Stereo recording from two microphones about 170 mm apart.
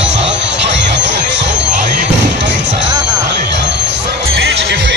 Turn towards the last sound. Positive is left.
turn(degrees=-90)